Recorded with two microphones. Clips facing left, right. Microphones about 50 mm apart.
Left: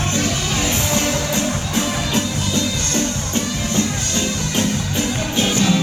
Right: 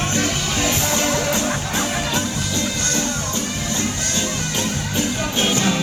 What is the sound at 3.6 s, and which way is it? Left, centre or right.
Music, left.